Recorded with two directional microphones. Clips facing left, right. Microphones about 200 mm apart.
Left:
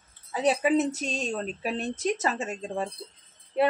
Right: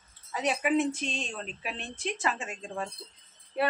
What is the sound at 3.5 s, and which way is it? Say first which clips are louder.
Speech: left 5 dB; 25° left (ahead or behind).